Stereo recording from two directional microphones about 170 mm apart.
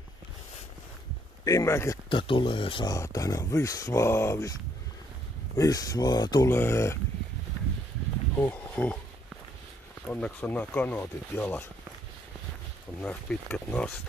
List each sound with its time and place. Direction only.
1.4 s speech: 20° left (ahead or behind)
2.0 s speech: 30° left (ahead or behind)
5.6 s speech: 20° left (ahead or behind)
8.4 s speech: 10° left (ahead or behind)
10.0 s speech: 5° left (ahead or behind)
13.0 s speech: 10° left (ahead or behind)